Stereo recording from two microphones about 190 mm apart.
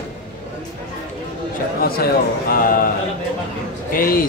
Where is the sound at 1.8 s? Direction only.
55° left (ahead or behind).